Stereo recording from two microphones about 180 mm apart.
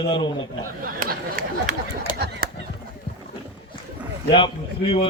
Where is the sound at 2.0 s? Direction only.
55° right (ahead or behind).